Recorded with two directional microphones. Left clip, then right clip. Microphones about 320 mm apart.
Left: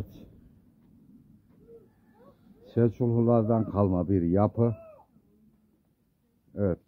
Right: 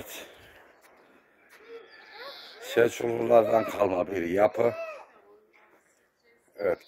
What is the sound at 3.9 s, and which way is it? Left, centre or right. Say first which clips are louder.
Speech: even; centre.